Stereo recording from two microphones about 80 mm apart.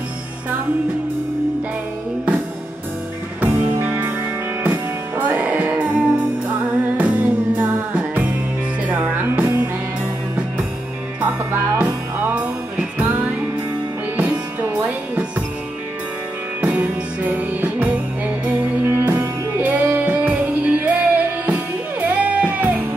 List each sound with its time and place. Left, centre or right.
3.3 s music: centre
11.1 s music: centre
16.6 s music: centre